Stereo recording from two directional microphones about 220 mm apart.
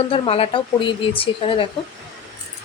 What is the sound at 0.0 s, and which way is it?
Speech, 25° left (ahead or behind).